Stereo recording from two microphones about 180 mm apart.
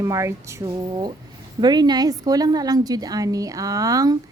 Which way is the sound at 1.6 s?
25° right (ahead or behind).